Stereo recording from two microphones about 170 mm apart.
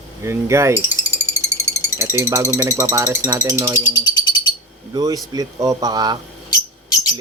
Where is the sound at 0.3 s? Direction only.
15° right (ahead or behind).